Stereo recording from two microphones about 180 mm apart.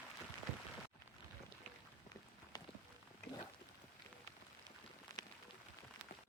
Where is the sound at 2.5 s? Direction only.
25° left (ahead or behind).